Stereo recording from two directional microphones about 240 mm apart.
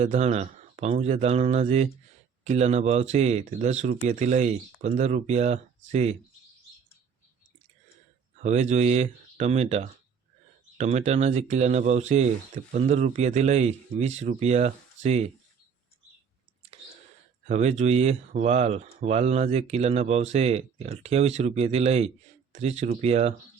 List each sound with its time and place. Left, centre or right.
0.0 s speech: right
8.4 s speech: right
17.4 s speech: right